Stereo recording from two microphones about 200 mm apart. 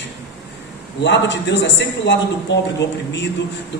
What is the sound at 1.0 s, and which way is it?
A man's voice, 60° left (ahead or behind).